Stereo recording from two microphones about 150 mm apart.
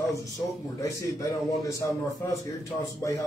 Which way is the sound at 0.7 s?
20° left (ahead or behind).